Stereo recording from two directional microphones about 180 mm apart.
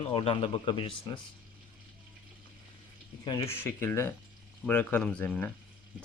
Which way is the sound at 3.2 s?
20° left (ahead or behind).